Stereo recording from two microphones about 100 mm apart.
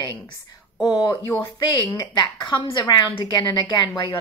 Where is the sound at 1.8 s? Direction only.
50° left (ahead or behind).